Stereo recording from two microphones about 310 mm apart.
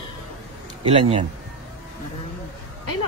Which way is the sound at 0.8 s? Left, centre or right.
Centre.